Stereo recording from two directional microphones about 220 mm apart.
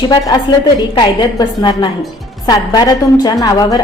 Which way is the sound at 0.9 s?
20° left (ahead or behind).